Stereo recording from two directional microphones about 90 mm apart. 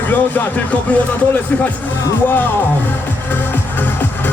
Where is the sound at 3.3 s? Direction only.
20° left (ahead or behind).